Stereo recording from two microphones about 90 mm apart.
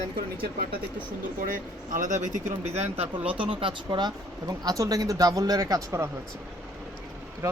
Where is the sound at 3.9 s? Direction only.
55° right (ahead or behind).